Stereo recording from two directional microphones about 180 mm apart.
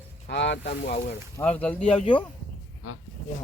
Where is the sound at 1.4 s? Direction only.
5° left (ahead or behind).